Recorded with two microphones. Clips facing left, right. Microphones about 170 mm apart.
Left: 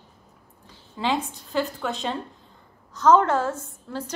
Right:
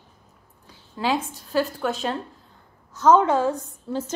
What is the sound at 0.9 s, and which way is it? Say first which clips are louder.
A woman's voice: right 1 dB; centre (ahead or behind).